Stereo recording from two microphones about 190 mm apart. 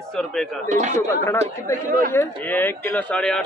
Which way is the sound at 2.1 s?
10° left (ahead or behind).